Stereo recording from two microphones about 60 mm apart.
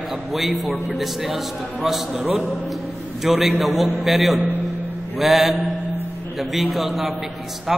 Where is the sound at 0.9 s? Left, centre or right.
Centre.